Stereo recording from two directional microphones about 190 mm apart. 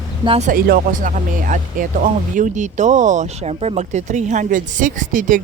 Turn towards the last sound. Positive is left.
turn(degrees=-45)  # may be behind; listen again after turning